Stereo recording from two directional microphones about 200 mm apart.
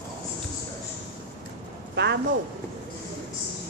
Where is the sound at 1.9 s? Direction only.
60° right (ahead or behind).